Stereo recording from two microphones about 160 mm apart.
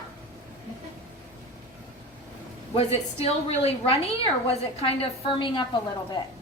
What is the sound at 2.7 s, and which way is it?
A woman's voice, 40° left (ahead or behind).